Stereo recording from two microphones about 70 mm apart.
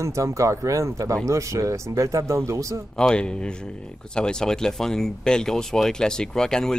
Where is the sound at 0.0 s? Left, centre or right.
Right.